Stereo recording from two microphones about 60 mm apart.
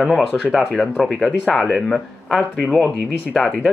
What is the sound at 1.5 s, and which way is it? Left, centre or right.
Speech, centre.